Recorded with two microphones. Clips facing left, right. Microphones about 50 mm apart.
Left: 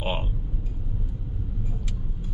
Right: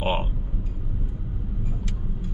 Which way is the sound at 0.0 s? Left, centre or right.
Centre.